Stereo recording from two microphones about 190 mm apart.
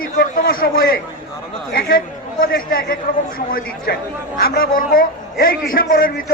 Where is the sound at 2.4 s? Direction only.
50° left (ahead or behind).